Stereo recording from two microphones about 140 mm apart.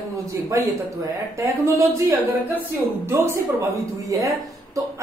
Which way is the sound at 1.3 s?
20° right (ahead or behind).